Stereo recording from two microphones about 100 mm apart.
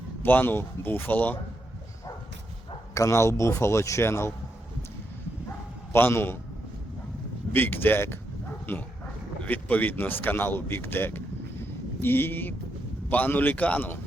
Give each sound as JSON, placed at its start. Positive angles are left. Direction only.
{"t": 0.2, "sound": "speech", "side_deg": 20}
{"t": 2.9, "sound": "speech", "side_deg": 30}
{"t": 5.9, "sound": "speech", "side_deg": 25}
{"t": 7.5, "sound": "speech", "side_deg": 20}